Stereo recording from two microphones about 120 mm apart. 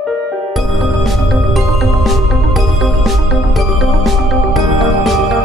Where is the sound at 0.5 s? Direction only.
Centre (ahead or behind).